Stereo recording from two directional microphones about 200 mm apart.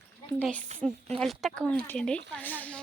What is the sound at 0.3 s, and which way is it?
A woman's voice, 5° left (ahead or behind).